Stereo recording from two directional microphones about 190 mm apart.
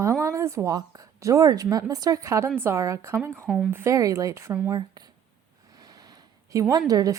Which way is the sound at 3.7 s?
15° right (ahead or behind).